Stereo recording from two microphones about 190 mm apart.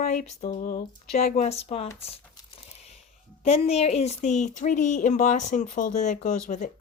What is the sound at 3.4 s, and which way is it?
Speech, 30° left (ahead or behind).